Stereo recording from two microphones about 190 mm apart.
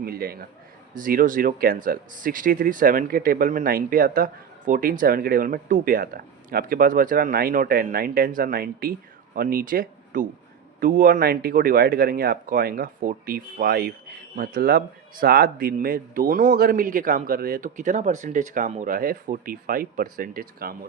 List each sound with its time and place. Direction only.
0.0 s speech: 55° right (ahead or behind)